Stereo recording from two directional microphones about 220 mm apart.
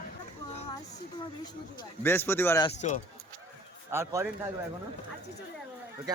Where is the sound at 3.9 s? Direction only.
15° right (ahead or behind).